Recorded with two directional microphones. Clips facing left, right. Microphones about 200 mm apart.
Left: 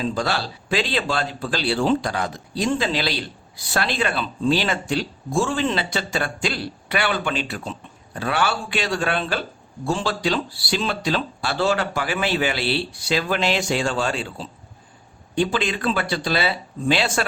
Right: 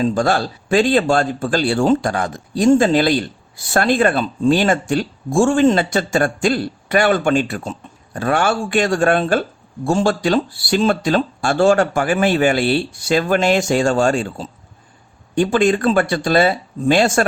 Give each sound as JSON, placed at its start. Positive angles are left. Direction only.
{"t": 0.0, "sound": "speech", "side_deg": -45}